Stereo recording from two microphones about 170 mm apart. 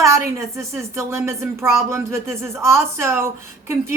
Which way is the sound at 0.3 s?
15° right (ahead or behind).